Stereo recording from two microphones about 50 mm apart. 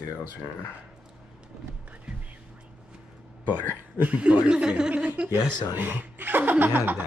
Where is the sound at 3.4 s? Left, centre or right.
Right.